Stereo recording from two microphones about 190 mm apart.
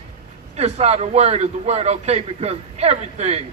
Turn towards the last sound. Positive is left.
turn(degrees=-30)  # may be behind; listen again after turning